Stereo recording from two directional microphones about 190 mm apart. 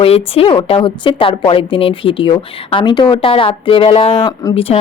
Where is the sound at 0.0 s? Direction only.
30° left (ahead or behind).